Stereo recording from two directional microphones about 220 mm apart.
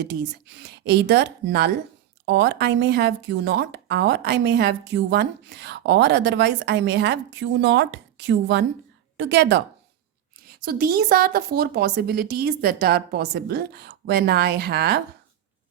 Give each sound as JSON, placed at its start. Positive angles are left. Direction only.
{"t": 0.0, "sound": "speech", "side_deg": -50}